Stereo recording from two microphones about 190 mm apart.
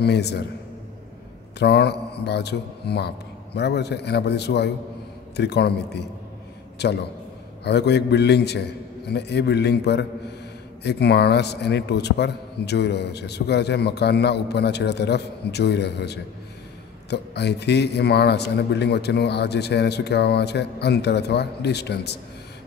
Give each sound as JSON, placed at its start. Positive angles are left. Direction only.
{"t": 0.0, "sound": "a man's voice", "side_deg": 60}
{"t": 1.6, "sound": "a man's voice", "side_deg": 60}